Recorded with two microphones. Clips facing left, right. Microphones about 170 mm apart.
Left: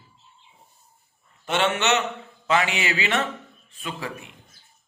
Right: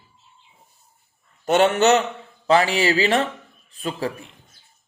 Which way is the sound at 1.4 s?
40° right (ahead or behind).